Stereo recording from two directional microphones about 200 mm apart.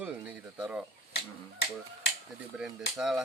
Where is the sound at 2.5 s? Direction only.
Centre (ahead or behind).